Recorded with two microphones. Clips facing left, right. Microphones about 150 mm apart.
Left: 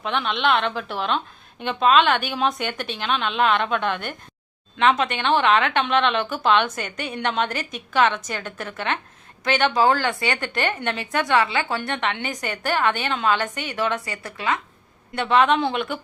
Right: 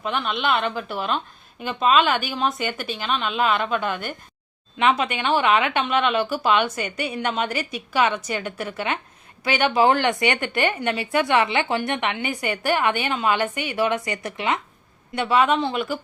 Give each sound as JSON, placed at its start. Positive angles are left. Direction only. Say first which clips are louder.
{"t": 0.0, "sound": "a woman's voice", "louder": "left 1 dB", "side_deg": -5}
{"t": 15.1, "sound": "a woman's voice", "louder": "left 1 dB", "side_deg": -10}